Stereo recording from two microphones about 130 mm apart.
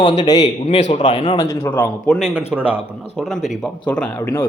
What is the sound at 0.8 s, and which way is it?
Speech, 65° left (ahead or behind).